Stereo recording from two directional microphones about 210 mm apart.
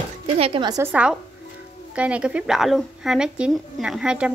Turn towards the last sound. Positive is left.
turn(degrees=-5)  # may be behind; listen again after turning